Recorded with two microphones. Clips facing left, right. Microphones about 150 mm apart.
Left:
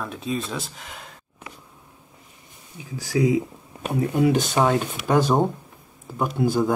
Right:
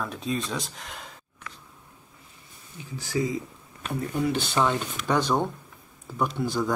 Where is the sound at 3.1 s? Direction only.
90° left.